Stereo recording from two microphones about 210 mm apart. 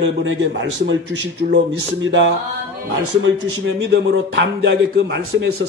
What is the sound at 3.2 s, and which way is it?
A man's voice, 60° right (ahead or behind).